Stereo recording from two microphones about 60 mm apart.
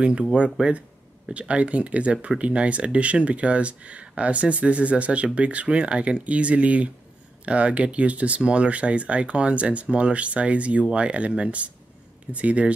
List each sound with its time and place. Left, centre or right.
0.0 s speech: centre